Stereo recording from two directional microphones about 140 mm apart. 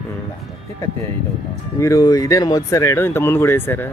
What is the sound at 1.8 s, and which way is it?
Speech, 25° left (ahead or behind).